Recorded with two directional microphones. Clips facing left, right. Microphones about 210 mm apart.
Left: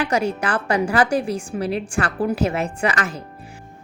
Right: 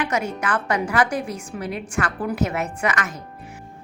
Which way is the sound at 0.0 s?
30° left (ahead or behind).